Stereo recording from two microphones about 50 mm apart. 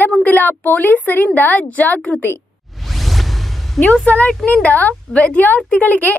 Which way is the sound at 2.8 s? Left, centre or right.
Centre.